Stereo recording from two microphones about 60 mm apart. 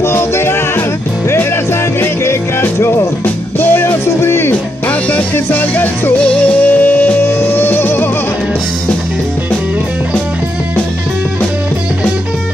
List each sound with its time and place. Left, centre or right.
0.0 s music: left
3.5 s music: left
4.8 s music: left
6.2 s music: left